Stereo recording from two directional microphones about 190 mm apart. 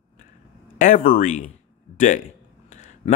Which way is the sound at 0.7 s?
45° left (ahead or behind).